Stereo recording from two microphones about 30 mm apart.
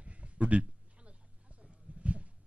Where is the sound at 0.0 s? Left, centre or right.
Right.